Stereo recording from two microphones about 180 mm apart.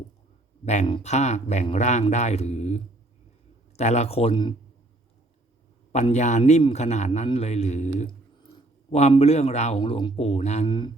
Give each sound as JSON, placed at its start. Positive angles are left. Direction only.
{"t": 0.6, "sound": "speech", "side_deg": 40}
{"t": 5.9, "sound": "speech", "side_deg": 40}
{"t": 10.7, "sound": "mantra", "side_deg": 25}